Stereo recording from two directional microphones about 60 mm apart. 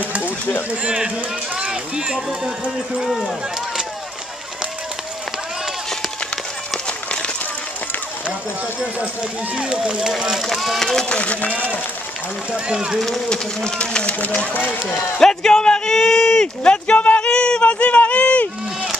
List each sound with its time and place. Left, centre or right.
0.0 s a sound: right
0.7 s speech: centre
5.9 s run: centre
8.3 s speech: centre
11.1 s speech: left
12.5 s speech: centre
13.0 s speech: centre; by 14.8 s left
15.1 s a sound: centre